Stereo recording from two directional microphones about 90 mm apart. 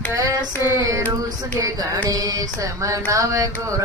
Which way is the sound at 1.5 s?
40° right (ahead or behind).